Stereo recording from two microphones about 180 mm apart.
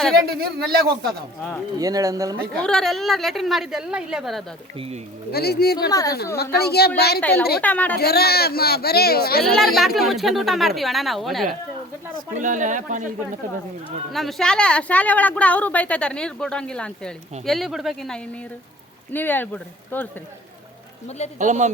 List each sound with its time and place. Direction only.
0.3 s a man's voice: 60° right (ahead or behind)
1.8 s speech: 20° right (ahead or behind)
2.6 s a woman's voice: 5° left (ahead or behind)
5.3 s speech: 60° left (ahead or behind)
5.9 s a woman's voice: 20° left (ahead or behind)
6.3 s speech: 60° left (ahead or behind)
7.2 s speech: 10° left (ahead or behind)
7.9 s speech: 60° left (ahead or behind)
9.4 s a woman's voice: centre (ahead or behind)
12.4 s speech: 45° right (ahead or behind)
14.1 s a woman's voice: centre (ahead or behind)
21.3 s speech: 40° right (ahead or behind)